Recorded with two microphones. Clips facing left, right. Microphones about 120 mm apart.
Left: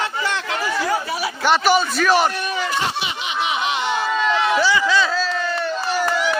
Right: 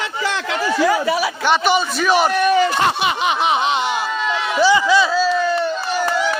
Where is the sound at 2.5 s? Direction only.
55° right (ahead or behind).